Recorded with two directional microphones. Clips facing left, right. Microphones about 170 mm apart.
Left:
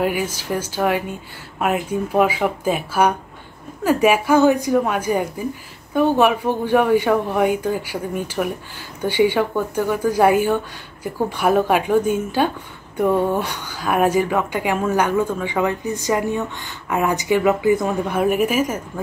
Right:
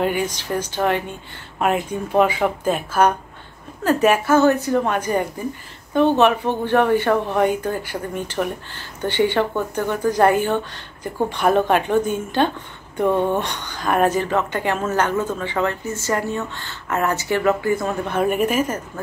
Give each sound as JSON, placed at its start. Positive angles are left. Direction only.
{"t": 0.0, "sound": "a woman's voice", "side_deg": 5}